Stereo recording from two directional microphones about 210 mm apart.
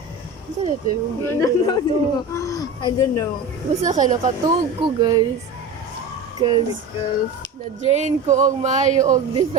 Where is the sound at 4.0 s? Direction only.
35° right (ahead or behind).